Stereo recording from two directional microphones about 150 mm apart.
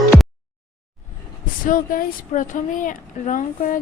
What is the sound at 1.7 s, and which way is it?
Speech, 60° left (ahead or behind).